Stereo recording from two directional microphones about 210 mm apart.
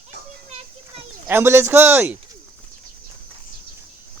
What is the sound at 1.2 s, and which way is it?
Speech, 10° right (ahead or behind).